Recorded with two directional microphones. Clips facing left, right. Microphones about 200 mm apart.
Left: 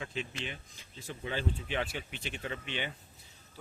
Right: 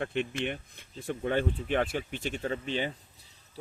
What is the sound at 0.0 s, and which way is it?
Speech, 60° right (ahead or behind).